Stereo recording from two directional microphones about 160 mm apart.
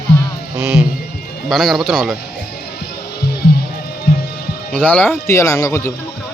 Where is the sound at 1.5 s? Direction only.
Centre (ahead or behind).